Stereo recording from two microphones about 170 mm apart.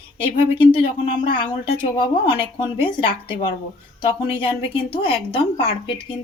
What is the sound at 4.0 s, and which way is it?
Speech, 35° left (ahead or behind).